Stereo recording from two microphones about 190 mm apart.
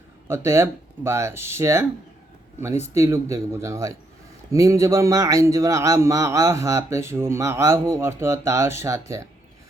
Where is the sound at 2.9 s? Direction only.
15° right (ahead or behind).